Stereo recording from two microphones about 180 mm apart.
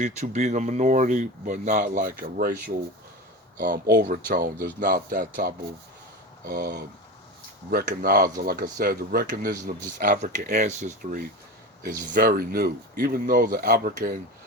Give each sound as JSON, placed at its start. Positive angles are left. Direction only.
{"t": 0.0, "sound": "speech", "side_deg": -40}
{"t": 6.4, "sound": "speech", "side_deg": -60}